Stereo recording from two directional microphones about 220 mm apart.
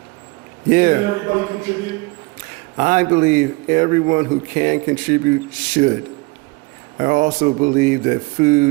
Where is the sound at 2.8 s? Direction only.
35° right (ahead or behind).